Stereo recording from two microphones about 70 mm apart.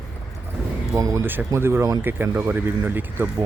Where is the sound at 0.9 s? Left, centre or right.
Right.